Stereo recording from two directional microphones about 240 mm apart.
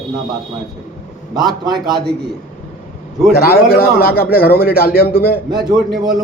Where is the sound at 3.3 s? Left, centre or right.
Left.